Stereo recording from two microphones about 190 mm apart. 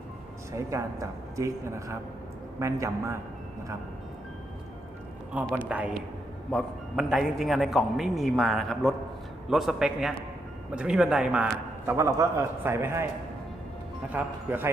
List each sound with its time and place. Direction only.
0.5 s speech: 15° right (ahead or behind)
5.6 s a man's voice: 5° right (ahead or behind)
11.9 s speech: 15° right (ahead or behind)
14.1 s speech: 10° right (ahead or behind)